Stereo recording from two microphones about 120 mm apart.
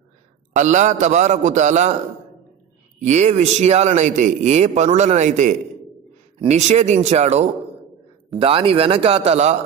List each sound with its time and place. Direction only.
0.5 s a man's voice: 90° right
3.0 s speech: 75° right (ahead or behind)
8.3 s speech: 50° right (ahead or behind); by 9.6 s 65° right (ahead or behind)